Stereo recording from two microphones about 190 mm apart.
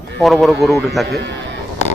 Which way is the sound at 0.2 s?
Centre (ahead or behind).